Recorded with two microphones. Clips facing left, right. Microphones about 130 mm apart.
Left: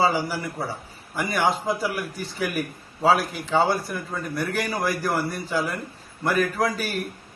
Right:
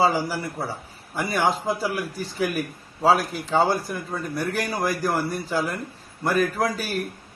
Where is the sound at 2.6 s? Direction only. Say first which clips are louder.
Even; centre (ahead or behind).